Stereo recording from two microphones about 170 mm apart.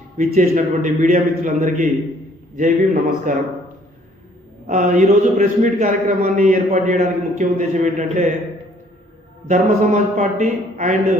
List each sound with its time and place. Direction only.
0.2 s a man's voice: 50° right (ahead or behind)
4.6 s a man's voice: 45° right (ahead or behind)
9.5 s a man's voice: 45° right (ahead or behind)